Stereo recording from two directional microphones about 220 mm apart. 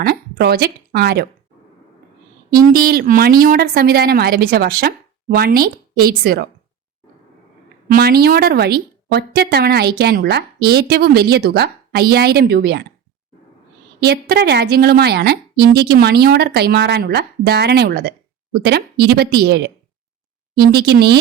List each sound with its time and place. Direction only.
0.0 s speech: 45° right (ahead or behind)
2.6 s a woman's voice: 40° right (ahead or behind)
7.9 s a woman's voice: 45° right (ahead or behind)
14.0 s a woman's voice: 45° right (ahead or behind)